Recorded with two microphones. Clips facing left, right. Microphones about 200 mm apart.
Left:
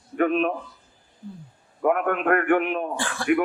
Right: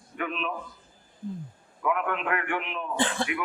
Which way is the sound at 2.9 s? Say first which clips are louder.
Right 3 dB; 20° right (ahead or behind).